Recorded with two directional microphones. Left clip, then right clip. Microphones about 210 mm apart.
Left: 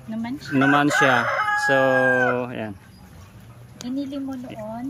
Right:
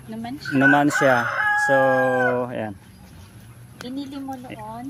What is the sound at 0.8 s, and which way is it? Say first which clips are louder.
Chicken: even; 15° left (ahead or behind).